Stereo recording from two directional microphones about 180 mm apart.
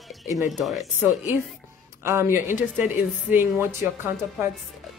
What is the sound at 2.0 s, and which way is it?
Speech, 15° right (ahead or behind).